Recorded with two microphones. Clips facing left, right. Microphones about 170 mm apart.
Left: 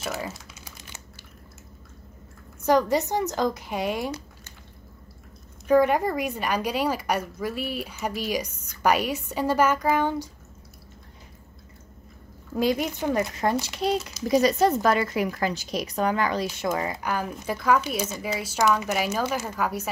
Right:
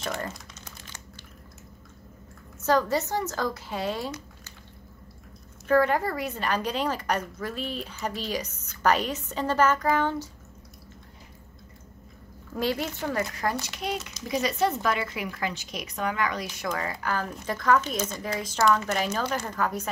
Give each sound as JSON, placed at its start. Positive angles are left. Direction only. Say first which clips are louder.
{"t": 0.0, "sound": "typing", "louder": "left 1 dB", "side_deg": 5}
{"t": 2.6, "sound": "a woman's voice", "louder": "left 3 dB", "side_deg": 15}
{"t": 5.7, "sound": "a woman's voice", "louder": "left 3 dB", "side_deg": 15}
{"t": 12.5, "sound": "a woman's voice", "louder": "left 4 dB", "side_deg": 15}